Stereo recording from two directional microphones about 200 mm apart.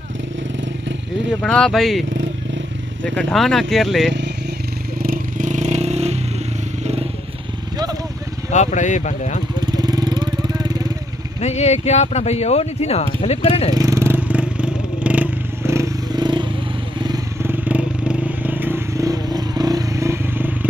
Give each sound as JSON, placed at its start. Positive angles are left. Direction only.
{"t": 1.4, "sound": "speech", "side_deg": 5}
{"t": 3.1, "sound": "speech", "side_deg": 5}
{"t": 5.0, "sound": "vehicle", "side_deg": -40}
{"t": 8.5, "sound": "speech", "side_deg": 35}
{"t": 9.7, "sound": "vehicle", "side_deg": -20}
{"t": 11.4, "sound": "speech", "side_deg": 35}
{"t": 13.7, "sound": "vehicle", "side_deg": -15}